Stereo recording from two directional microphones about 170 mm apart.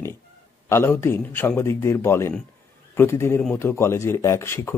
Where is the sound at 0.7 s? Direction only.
15° left (ahead or behind).